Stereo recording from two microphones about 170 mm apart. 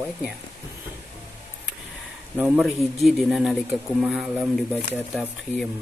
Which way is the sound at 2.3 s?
10° right (ahead or behind).